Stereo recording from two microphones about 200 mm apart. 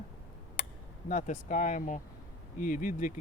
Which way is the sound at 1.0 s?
40° left (ahead or behind).